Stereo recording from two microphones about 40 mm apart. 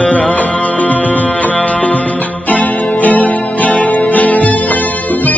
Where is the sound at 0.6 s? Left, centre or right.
Left.